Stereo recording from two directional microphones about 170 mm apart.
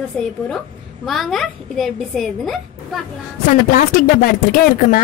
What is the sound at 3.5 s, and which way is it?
Speech, 55° left (ahead or behind).